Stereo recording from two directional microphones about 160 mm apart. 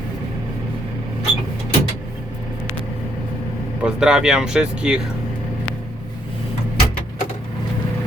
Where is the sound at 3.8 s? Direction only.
5° right (ahead or behind).